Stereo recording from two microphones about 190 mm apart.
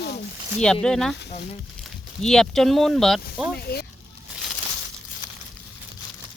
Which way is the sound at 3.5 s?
55° left (ahead or behind).